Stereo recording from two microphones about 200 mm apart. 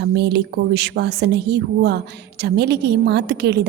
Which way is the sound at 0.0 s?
60° right (ahead or behind).